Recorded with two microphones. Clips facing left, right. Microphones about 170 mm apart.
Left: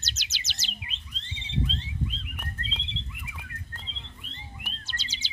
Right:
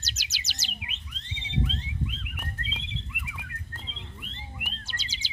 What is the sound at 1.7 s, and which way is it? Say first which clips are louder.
Bird: left 1 dB; 30° left (ahead or behind).